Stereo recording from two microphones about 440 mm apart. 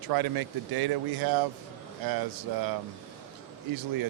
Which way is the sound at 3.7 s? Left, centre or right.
Right.